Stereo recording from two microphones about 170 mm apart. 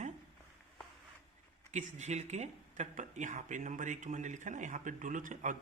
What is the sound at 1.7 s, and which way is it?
Speech, 45° right (ahead or behind).